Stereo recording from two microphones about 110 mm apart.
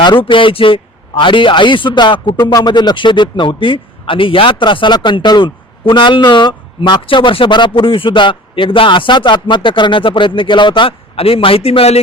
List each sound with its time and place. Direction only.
0.0 s a man's voice: 45° left (ahead or behind)
2.4 s a man's voice: 35° left (ahead or behind); by 11.9 s 65° left (ahead or behind)